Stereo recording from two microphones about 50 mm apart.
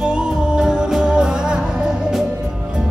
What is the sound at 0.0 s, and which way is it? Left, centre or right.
Music, centre.